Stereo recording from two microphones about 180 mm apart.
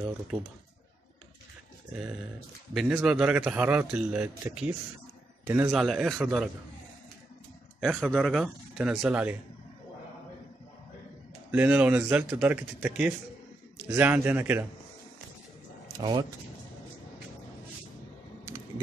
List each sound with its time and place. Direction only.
2.7 s a man's voice: centre (ahead or behind)
7.8 s a man's voice: centre (ahead or behind)
11.5 s speech: 10° right (ahead or behind)
16.0 s speech: 25° right (ahead or behind)